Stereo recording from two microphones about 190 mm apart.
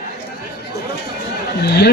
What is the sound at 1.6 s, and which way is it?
Speech, 60° left (ahead or behind).